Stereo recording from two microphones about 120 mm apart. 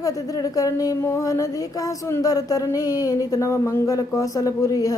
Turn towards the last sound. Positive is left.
turn(degrees=30)  # may be behind; listen again after turning